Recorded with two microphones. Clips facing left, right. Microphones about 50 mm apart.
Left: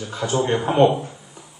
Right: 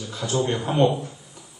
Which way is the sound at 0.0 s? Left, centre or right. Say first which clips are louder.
Left 3 dB; left.